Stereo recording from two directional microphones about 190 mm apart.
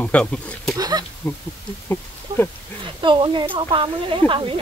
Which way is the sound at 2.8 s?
25° right (ahead or behind).